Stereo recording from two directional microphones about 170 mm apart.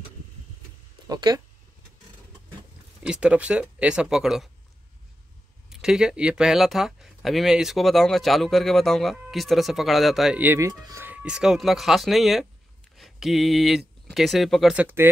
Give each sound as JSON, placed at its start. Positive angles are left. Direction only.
{"t": 1.0, "sound": "speech", "side_deg": -25}
{"t": 3.0, "sound": "speech", "side_deg": -5}
{"t": 5.7, "sound": "speech", "side_deg": -5}